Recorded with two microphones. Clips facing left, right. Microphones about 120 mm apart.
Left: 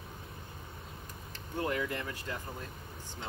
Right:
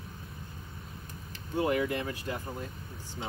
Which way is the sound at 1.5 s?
10° right (ahead or behind).